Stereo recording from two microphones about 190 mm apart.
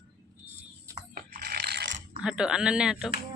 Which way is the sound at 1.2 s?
55° right (ahead or behind).